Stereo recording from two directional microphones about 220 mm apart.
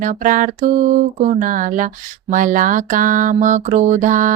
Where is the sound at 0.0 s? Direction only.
35° right (ahead or behind).